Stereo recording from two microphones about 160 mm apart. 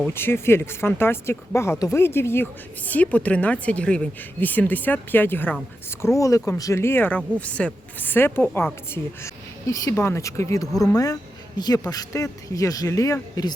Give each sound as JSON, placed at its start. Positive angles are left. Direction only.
{"t": 0.1, "sound": "speech", "side_deg": 15}